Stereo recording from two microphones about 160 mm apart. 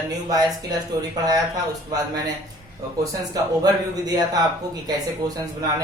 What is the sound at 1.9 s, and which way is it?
Speech, 25° right (ahead or behind).